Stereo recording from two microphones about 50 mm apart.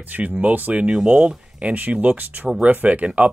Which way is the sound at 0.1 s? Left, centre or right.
Right.